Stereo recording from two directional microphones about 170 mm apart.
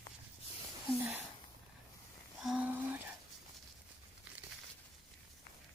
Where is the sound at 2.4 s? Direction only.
5° right (ahead or behind).